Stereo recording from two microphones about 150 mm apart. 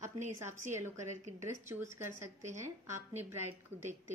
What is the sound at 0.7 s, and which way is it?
A woman's voice, 20° right (ahead or behind).